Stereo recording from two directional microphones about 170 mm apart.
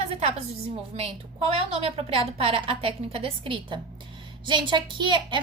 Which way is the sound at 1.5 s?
35° right (ahead or behind).